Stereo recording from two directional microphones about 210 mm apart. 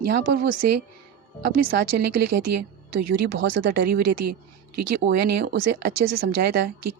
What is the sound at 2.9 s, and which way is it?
Speech, 50° right (ahead or behind).